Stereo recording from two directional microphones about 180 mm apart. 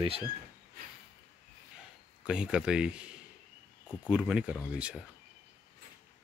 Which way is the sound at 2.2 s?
5° right (ahead or behind).